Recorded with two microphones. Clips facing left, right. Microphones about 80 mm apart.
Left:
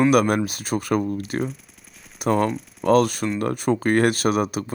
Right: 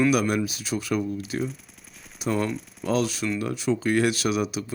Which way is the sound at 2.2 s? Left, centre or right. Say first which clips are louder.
Left 5 dB; left.